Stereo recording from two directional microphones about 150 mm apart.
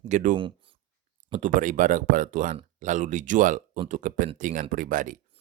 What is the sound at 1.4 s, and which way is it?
Speech, 60° right (ahead or behind).